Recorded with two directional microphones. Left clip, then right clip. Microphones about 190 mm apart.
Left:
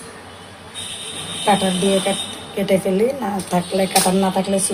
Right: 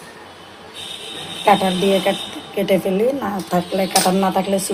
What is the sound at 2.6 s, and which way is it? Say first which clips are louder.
Speech: even; 30° right (ahead or behind).